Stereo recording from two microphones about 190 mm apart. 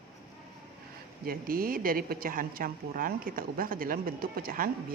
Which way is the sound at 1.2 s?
50° right (ahead or behind).